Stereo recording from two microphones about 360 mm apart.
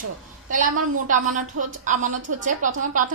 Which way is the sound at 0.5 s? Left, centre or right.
Right.